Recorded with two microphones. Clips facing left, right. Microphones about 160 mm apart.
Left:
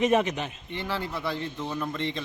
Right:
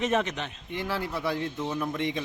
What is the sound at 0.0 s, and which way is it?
Speech, 10° left (ahead or behind).